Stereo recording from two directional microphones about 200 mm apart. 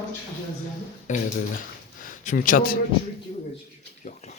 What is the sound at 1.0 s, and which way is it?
Speech, 40° left (ahead or behind).